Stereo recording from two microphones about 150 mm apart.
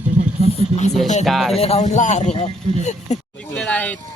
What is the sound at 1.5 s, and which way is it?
A man's voice, 40° left (ahead or behind).